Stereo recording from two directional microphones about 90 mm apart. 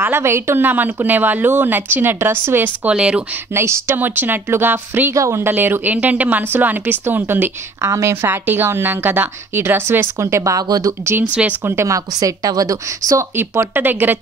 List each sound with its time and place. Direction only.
0.0 s speech: 25° right (ahead or behind); by 3.3 s 10° right (ahead or behind)
3.5 s speech: 30° right (ahead or behind)
7.8 s speech: 35° right (ahead or behind)
11.6 s a woman's voice: 30° right (ahead or behind)
13.4 s speech: 25° right (ahead or behind)